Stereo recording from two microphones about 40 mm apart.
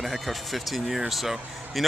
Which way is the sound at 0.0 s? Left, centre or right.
Centre.